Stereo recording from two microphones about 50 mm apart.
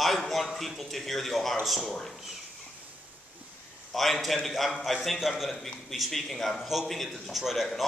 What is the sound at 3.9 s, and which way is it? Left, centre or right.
A man's voice, centre.